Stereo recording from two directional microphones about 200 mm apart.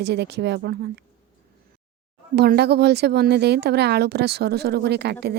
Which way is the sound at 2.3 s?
55° right (ahead or behind).